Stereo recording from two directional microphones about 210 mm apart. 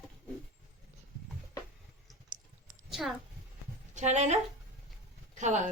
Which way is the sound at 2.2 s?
40° right (ahead or behind).